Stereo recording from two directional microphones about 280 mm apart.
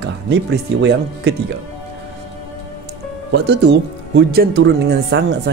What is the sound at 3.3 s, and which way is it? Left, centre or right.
Speech, right.